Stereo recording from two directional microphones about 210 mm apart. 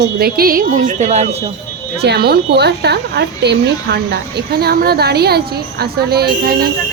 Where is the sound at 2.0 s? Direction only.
50° right (ahead or behind).